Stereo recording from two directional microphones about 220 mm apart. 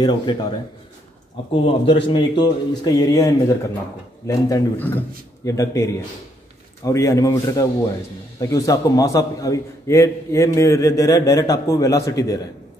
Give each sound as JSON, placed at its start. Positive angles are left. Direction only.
{"t": 0.0, "sound": "a man's voice", "side_deg": 20}
{"t": 4.3, "sound": "a man's voice", "side_deg": 10}